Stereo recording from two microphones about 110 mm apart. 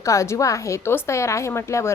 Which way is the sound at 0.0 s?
30° left (ahead or behind).